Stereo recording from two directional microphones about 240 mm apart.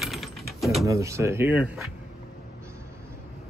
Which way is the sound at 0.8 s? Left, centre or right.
Centre.